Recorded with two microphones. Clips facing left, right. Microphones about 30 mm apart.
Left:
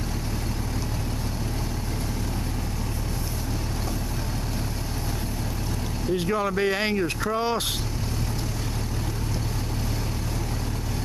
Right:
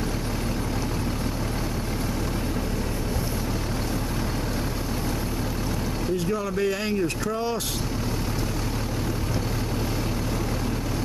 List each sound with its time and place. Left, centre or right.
6.1 s speech: left